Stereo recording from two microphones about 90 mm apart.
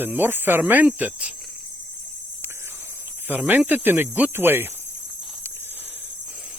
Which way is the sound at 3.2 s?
20° right (ahead or behind).